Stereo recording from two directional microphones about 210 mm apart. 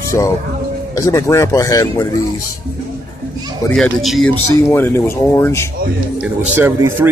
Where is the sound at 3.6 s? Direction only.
5° left (ahead or behind).